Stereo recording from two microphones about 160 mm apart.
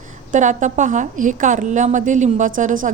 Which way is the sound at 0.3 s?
50° right (ahead or behind).